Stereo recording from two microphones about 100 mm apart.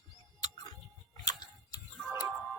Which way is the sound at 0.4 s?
45° left (ahead or behind).